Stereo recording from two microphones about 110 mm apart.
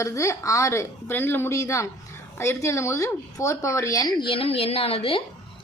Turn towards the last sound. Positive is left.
turn(degrees=60)  # may be behind; listen again after turning